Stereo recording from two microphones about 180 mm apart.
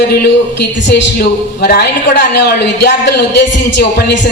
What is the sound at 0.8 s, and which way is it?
A man's voice, 75° left (ahead or behind).